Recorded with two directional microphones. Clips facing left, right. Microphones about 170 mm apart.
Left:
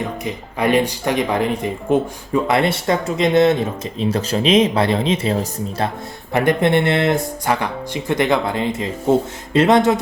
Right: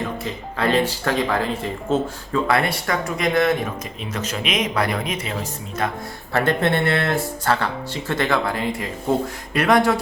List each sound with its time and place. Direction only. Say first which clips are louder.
0.3 s speech: left 4 dB; 15° left (ahead or behind); by 5.9 s 35° left (ahead or behind)
6.3 s speech: left 4 dB; 15° left (ahead or behind)